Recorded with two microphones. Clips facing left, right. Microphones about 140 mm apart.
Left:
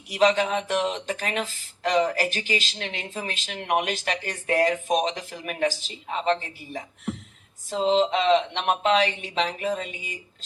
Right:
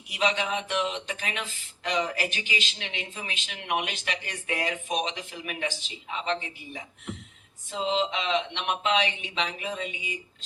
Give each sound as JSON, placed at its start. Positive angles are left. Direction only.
{"t": 0.1, "sound": "speech", "side_deg": 40}